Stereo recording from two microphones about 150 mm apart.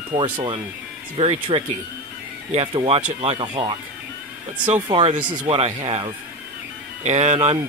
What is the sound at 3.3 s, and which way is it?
Speech, 30° right (ahead or behind).